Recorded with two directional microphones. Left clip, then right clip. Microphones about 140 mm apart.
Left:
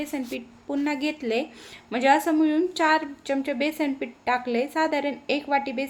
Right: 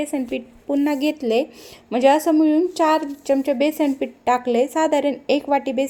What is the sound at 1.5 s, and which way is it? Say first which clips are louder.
A woman's voice: right 6 dB; 20° right (ahead or behind).